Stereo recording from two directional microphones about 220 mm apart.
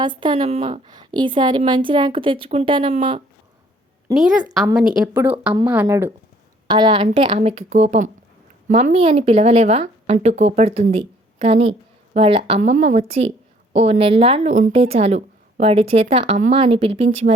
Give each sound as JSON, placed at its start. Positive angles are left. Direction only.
{"t": 0.0, "sound": "a woman's voice", "side_deg": -20}
{"t": 4.6, "sound": "a woman's voice", "side_deg": -5}
{"t": 6.7, "sound": "a woman's voice", "side_deg": -20}
{"t": 12.5, "sound": "a woman's voice", "side_deg": -35}